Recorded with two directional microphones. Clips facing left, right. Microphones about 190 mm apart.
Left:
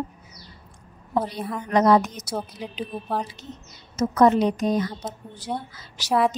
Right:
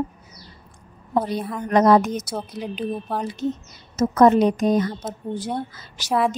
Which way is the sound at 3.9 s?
50° right (ahead or behind).